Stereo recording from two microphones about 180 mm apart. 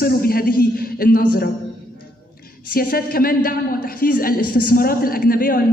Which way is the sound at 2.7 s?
55° left (ahead or behind).